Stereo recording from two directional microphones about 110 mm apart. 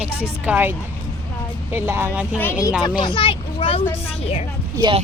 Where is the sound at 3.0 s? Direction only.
50° left (ahead or behind).